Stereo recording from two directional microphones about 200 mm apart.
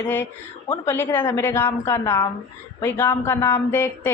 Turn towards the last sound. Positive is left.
turn(degrees=15)  # may be behind; listen again after turning